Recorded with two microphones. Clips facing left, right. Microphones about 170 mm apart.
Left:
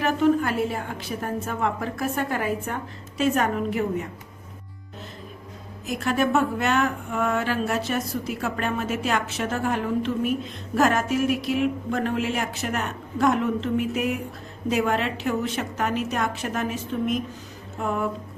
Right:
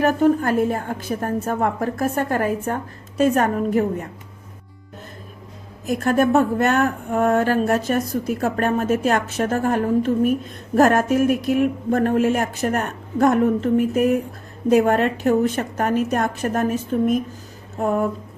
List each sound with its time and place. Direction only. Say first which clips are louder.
0.0 s speech: right 4 dB; 45° right (ahead or behind)
5.8 s speech: right 5 dB; 50° right (ahead or behind)
17.7 s a sound: right 6 dB; 45° right (ahead or behind)